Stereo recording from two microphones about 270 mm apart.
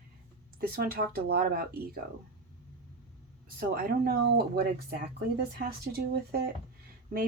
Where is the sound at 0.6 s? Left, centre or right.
Right.